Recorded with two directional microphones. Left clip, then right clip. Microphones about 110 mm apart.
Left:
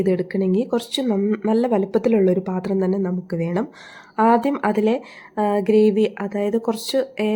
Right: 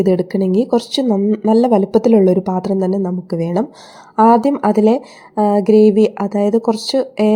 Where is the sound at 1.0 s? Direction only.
5° right (ahead or behind).